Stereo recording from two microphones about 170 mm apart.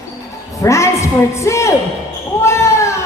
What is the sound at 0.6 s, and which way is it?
A man's voice, 15° left (ahead or behind).